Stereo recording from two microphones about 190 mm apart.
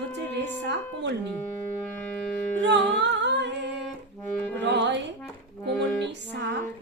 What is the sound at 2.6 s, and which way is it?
Humming, 70° right (ahead or behind).